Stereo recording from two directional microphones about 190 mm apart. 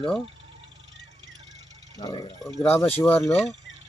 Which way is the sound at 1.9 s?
20° left (ahead or behind).